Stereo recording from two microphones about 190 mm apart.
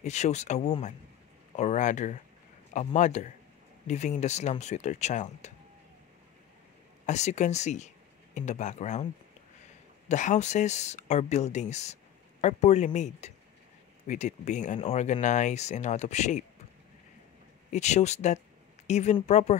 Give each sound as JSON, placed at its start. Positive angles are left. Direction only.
{"t": 0.0, "sound": "speech", "side_deg": 35}
{"t": 7.1, "sound": "speech", "side_deg": 35}
{"t": 10.0, "sound": "speech", "side_deg": 40}
{"t": 17.6, "sound": "speech", "side_deg": 35}